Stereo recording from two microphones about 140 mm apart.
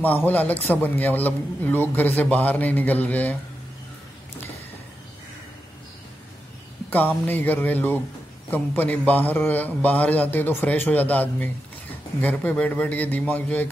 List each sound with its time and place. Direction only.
0.0 s a man's voice: 10° left (ahead or behind)
6.9 s a man's voice: 15° left (ahead or behind)